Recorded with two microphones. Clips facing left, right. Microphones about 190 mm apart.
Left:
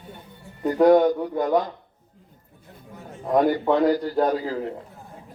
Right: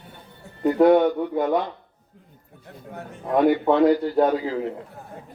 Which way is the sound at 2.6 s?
65° right (ahead or behind).